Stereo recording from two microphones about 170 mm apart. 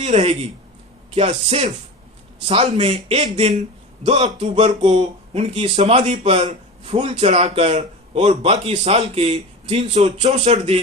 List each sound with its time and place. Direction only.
0.0 s a man's voice: 35° right (ahead or behind)